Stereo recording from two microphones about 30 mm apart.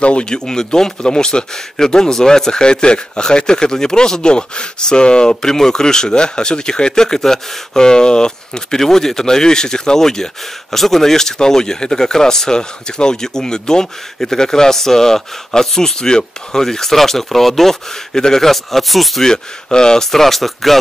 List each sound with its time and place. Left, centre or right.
0.0 s speech: left
0.3 s speech: left
8.7 s speech: centre
16.6 s speech: centre
18.1 s speech: centre
18.5 s speech: centre
19.2 s speech: left
20.1 s speech: centre